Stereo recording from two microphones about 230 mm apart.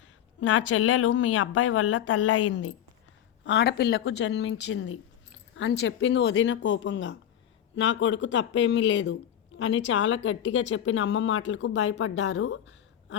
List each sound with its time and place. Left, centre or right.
0.3 s a woman's voice: left